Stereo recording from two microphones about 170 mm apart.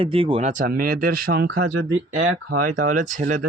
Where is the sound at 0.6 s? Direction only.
60° right (ahead or behind).